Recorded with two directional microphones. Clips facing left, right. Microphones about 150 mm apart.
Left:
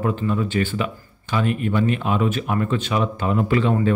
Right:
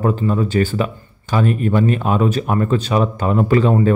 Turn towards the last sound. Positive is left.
turn(degrees=-40)  # may be behind; listen again after turning